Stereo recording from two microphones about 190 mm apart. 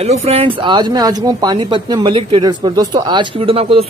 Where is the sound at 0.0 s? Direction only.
35° right (ahead or behind).